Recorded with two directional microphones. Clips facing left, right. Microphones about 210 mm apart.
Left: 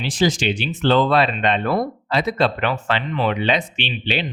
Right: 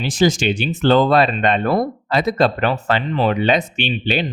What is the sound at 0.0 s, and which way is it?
Speech, 45° right (ahead or behind).